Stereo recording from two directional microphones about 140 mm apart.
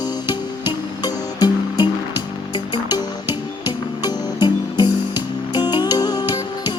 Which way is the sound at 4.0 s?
30° left (ahead or behind).